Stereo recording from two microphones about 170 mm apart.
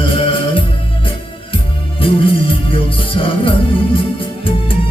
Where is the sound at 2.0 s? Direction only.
30° left (ahead or behind).